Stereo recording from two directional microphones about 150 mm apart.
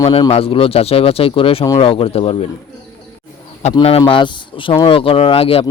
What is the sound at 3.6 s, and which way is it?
Speech, 50° left (ahead or behind).